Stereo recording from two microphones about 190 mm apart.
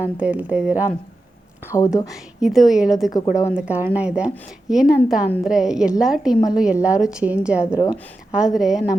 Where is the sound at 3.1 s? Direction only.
15° left (ahead or behind).